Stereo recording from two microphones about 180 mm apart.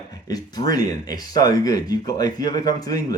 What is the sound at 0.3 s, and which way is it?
Speech, 20° left (ahead or behind).